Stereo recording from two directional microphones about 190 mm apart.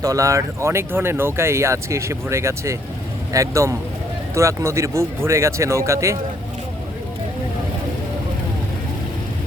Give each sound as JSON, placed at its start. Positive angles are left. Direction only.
{"t": 0.0, "sound": "speech", "side_deg": -20}